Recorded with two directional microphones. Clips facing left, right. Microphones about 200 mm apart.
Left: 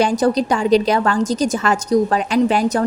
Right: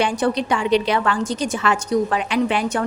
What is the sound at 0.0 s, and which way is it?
A woman's voice, 40° left (ahead or behind).